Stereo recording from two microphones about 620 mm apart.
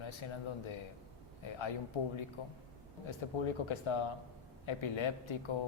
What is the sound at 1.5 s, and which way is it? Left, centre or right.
Speech, left.